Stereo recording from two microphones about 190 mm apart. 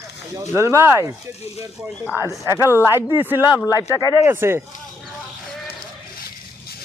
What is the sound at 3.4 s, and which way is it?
Speech, 20° left (ahead or behind).